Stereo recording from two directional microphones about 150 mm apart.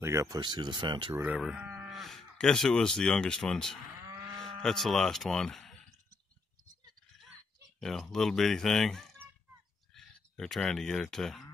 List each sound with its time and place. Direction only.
0.0 s speech: 20° right (ahead or behind)
1.1 s speech: 10° right (ahead or behind)
7.8 s speech: 5° left (ahead or behind)